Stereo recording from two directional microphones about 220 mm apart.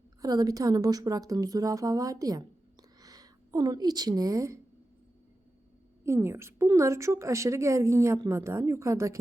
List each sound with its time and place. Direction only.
0.2 s a woman's voice: 15° right (ahead or behind)
6.0 s a woman's voice: 10° right (ahead or behind)